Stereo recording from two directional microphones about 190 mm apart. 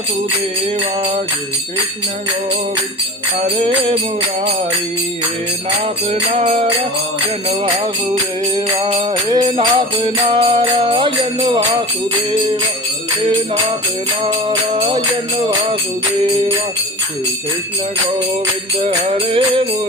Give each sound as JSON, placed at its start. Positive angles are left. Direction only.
{"t": 6.3, "sound": "music", "side_deg": -35}
{"t": 9.3, "sound": "music", "side_deg": -25}
{"t": 18.8, "sound": "music", "side_deg": -30}